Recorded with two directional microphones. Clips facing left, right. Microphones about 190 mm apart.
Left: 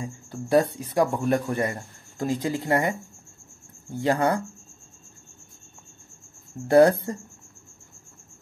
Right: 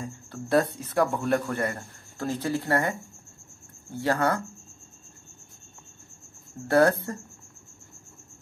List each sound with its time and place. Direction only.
0.0 s speech: 15° left (ahead or behind)
4.0 s speech: 15° left (ahead or behind)
6.7 s speech: 15° left (ahead or behind)